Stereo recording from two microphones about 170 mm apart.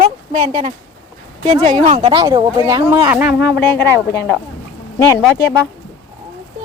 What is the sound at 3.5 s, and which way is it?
Speech, 10° left (ahead or behind).